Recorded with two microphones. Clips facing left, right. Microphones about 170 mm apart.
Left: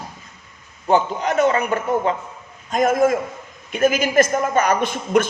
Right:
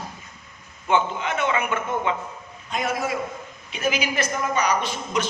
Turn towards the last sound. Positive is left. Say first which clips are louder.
# left 7 dB
turn(degrees=55)  # may be behind; listen again after turning